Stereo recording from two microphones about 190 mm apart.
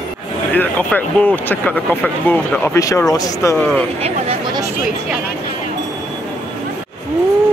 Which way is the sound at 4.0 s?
30° right (ahead or behind).